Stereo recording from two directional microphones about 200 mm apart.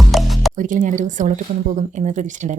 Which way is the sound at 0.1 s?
Centre (ahead or behind).